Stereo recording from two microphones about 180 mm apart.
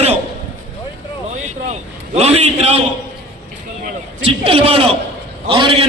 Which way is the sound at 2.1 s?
35° right (ahead or behind).